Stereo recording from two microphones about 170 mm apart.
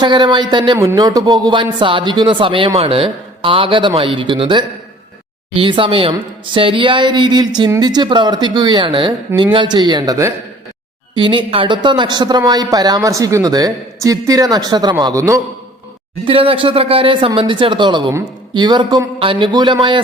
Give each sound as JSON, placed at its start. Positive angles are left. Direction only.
{"t": 0.0, "sound": "speech", "side_deg": -30}
{"t": 16.2, "sound": "speech", "side_deg": -30}